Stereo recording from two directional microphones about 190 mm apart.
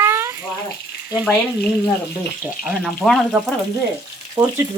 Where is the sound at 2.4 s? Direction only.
5° right (ahead or behind).